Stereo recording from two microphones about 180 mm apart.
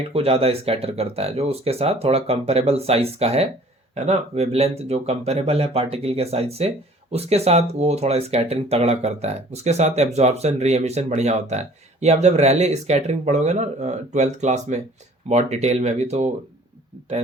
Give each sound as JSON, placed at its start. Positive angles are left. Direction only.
{"t": 0.1, "sound": "speech", "side_deg": -35}